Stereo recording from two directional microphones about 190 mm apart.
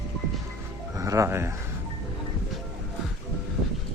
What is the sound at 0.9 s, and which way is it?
Speech, 15° right (ahead or behind).